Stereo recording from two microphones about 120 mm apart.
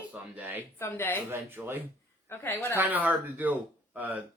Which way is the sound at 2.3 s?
20° left (ahead or behind).